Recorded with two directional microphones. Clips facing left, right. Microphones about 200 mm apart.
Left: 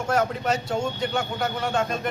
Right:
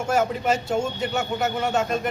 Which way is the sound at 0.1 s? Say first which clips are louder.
Right 2 dB; 5° right (ahead or behind).